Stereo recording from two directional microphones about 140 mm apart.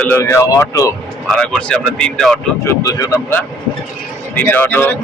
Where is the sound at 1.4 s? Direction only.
5° left (ahead or behind).